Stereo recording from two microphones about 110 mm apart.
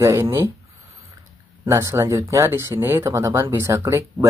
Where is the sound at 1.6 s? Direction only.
25° right (ahead or behind).